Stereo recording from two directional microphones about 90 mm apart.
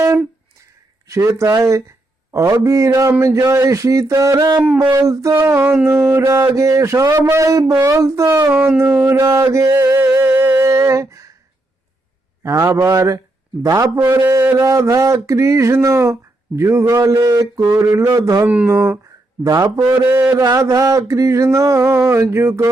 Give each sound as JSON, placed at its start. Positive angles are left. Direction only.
{"t": 1.0, "sound": "a man's voice", "side_deg": -35}
{"t": 4.6, "sound": "a sound", "side_deg": -15}
{"t": 4.9, "sound": "a man's voice", "side_deg": -35}
{"t": 8.4, "sound": "a sound", "side_deg": -15}
{"t": 9.0, "sound": "a man's voice", "side_deg": -25}
{"t": 9.2, "sound": "music", "side_deg": -35}
{"t": 10.6, "sound": "humming", "side_deg": -35}
{"t": 12.4, "sound": "a man's voice", "side_deg": -30}
{"t": 18.4, "sound": "a sound", "side_deg": -15}
{"t": 18.7, "sound": "a man's voice", "side_deg": -30}
{"t": 20.6, "sound": "a man's voice", "side_deg": -35}